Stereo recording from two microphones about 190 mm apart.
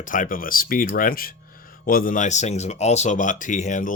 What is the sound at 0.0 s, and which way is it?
Speech, 45° left (ahead or behind).